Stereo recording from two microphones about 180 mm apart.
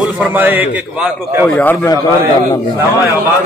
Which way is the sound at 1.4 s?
10° left (ahead or behind).